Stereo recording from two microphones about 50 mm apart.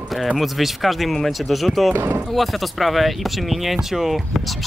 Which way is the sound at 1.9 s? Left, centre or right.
Right.